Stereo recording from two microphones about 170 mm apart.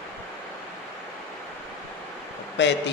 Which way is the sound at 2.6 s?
90° left.